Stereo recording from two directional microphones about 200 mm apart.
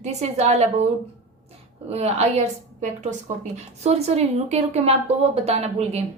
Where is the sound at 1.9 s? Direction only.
30° right (ahead or behind).